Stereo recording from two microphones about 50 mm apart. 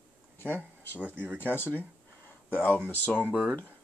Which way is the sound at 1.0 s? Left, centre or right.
Right.